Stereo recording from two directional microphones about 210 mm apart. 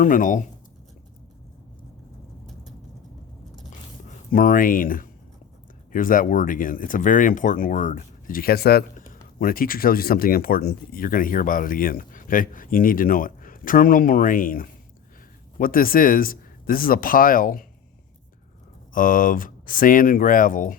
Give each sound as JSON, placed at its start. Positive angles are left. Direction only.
{"t": 0.0, "sound": "speech", "side_deg": 40}
{"t": 4.3, "sound": "speech", "side_deg": 40}
{"t": 18.9, "sound": "speech", "side_deg": 40}